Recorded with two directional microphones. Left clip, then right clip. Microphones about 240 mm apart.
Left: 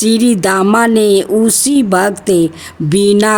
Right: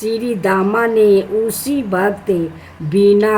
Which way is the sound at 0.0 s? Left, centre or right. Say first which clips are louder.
Left 5 dB; left.